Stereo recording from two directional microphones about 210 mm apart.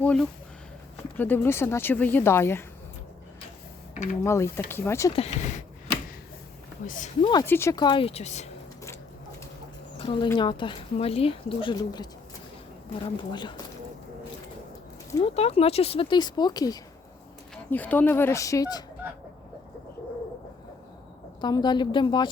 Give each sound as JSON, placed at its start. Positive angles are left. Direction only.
{"t": 0.0, "sound": "speech", "side_deg": 5}
{"t": 3.9, "sound": "speech", "side_deg": 35}
{"t": 4.2, "sound": "speech", "side_deg": 15}
{"t": 5.1, "sound": "speech", "side_deg": 30}
{"t": 6.8, "sound": "speech", "side_deg": 35}
{"t": 7.4, "sound": "speech", "side_deg": 10}
{"t": 10.0, "sound": "a woman's voice", "side_deg": 25}
{"t": 15.2, "sound": "speech", "side_deg": 30}
{"t": 21.4, "sound": "speech", "side_deg": 20}